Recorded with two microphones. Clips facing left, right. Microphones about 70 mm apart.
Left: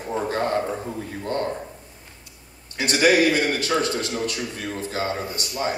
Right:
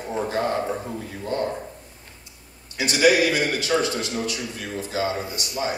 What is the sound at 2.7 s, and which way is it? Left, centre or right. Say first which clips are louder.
A man's voice: even; left.